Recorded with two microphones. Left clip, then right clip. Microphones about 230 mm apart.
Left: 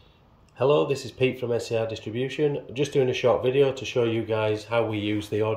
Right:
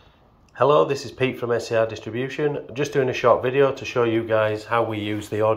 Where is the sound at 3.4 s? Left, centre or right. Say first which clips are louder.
Right 2 dB; centre.